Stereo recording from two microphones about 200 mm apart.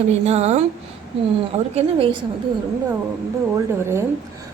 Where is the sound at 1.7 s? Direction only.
30° right (ahead or behind).